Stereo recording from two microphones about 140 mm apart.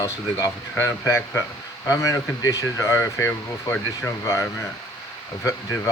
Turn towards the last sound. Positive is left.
turn(degrees=25)  # may be behind; listen again after turning